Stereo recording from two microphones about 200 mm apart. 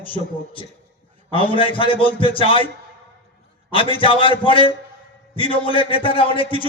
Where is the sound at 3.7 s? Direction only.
25° left (ahead or behind).